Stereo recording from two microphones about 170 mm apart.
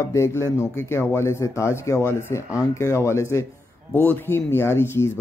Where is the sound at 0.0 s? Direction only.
15° left (ahead or behind).